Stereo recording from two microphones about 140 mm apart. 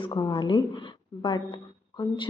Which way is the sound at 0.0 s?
35° left (ahead or behind).